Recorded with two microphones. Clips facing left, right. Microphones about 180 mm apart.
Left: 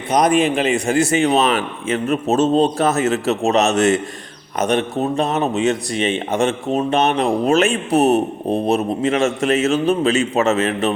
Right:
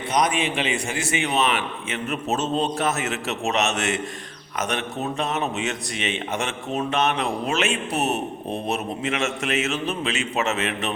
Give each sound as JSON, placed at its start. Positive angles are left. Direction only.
{"t": 0.2, "sound": "a man's voice", "side_deg": 40}